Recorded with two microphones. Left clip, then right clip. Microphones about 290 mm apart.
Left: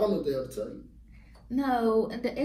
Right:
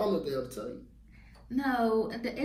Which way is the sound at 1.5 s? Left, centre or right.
Centre.